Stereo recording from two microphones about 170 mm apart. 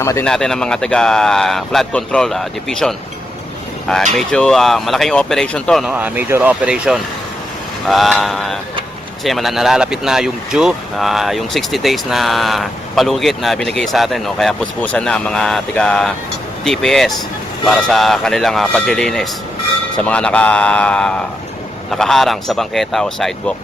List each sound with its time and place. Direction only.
0.0 s a man's voice: 20° left (ahead or behind)
0.3 s a man's voice: 5° left (ahead or behind)